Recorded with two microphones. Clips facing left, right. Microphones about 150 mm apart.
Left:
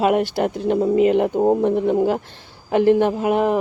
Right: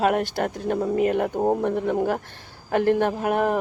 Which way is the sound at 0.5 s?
25° left (ahead or behind).